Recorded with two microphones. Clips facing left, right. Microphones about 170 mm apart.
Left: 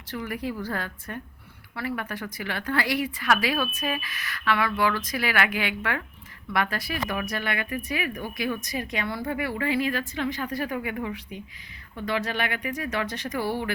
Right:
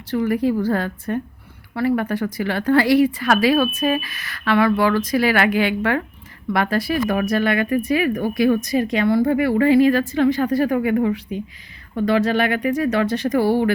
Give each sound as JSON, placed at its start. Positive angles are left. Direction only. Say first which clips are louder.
{"t": 0.1, "sound": "speech", "louder": "right 12 dB", "side_deg": -30}